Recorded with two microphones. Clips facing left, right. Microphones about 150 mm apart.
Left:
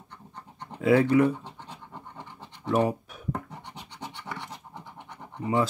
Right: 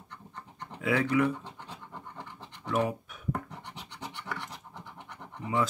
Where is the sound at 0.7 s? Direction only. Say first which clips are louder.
Left 6 dB; 35° left (ahead or behind).